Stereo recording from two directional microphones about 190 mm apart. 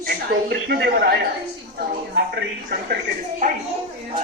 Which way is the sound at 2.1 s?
60° right (ahead or behind).